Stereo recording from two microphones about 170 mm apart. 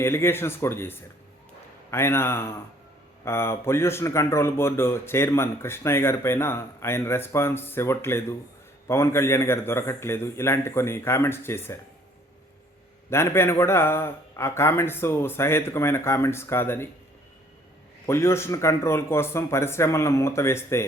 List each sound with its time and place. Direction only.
0.0 s a man's voice: 15° left (ahead or behind)
13.1 s a man's voice: 15° left (ahead or behind)
18.0 s a man's voice: 15° left (ahead or behind)